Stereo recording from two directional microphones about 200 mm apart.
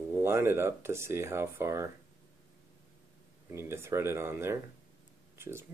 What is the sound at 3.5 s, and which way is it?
Speech, 10° right (ahead or behind).